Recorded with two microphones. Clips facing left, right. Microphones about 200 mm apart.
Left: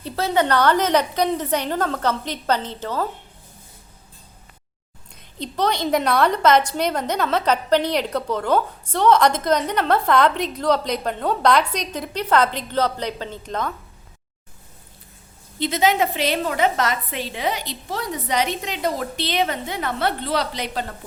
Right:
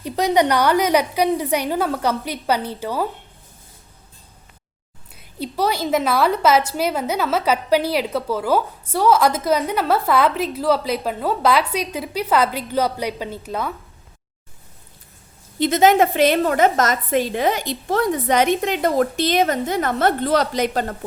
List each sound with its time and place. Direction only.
0.0 s a woman's voice: 15° right (ahead or behind)
5.4 s a woman's voice: 5° right (ahead or behind)
15.5 s a woman's voice: 50° right (ahead or behind)